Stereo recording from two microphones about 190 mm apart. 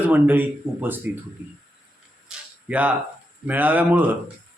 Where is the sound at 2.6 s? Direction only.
10° right (ahead or behind).